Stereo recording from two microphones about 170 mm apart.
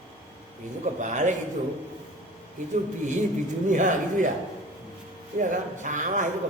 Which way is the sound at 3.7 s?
50° right (ahead or behind).